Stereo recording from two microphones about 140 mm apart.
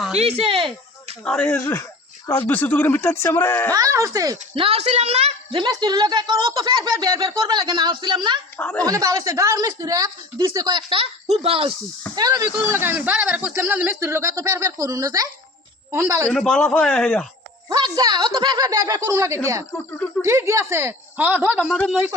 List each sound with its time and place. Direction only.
0.2 s speech: 45° right (ahead or behind)
1.2 s speech: 5° left (ahead or behind)
3.7 s a woman's voice: 25° right (ahead or behind)
4.5 s a woman's voice: 45° right (ahead or behind)
5.5 s speech: 30° right (ahead or behind)
8.5 s a woman's voice: 10° left (ahead or behind)
8.8 s a woman's voice: 25° right (ahead or behind); by 11.7 s 45° right (ahead or behind)
12.1 s a woman's voice: 25° right (ahead or behind)
12.6 s a man's voice: 15° right (ahead or behind)
16.2 s speech: 5° left (ahead or behind)
17.7 s a woman's voice: 30° right (ahead or behind)
19.7 s speech: 10° left (ahead or behind)
20.2 s a man's voice: 20° right (ahead or behind)
21.6 s speech: 5° left (ahead or behind)